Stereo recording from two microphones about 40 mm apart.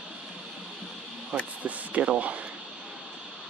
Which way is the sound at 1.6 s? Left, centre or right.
Right.